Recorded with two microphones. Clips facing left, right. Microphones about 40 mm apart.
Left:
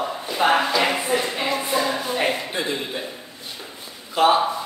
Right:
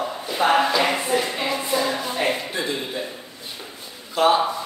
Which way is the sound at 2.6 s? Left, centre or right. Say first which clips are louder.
Even; centre.